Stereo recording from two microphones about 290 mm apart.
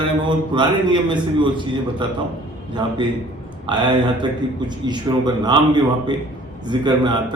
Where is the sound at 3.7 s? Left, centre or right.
Centre.